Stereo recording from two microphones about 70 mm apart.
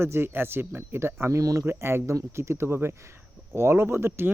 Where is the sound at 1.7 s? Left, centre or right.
Right.